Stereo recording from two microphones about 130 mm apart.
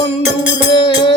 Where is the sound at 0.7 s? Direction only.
40° left (ahead or behind).